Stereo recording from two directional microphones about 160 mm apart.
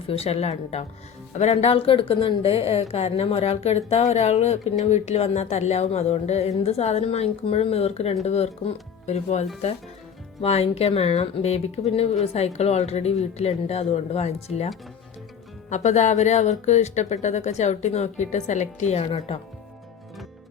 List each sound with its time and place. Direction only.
0.1 s speech: 40° left (ahead or behind)
15.7 s speech: 45° left (ahead or behind)